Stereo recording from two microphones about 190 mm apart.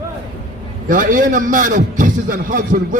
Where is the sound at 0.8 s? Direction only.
45° right (ahead or behind).